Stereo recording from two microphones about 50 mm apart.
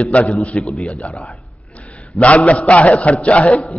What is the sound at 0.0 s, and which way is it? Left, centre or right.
Speech, left.